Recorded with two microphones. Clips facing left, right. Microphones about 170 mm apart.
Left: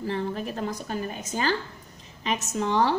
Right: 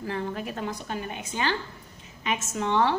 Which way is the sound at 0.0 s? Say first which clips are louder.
Left 2 dB; 35° left (ahead or behind).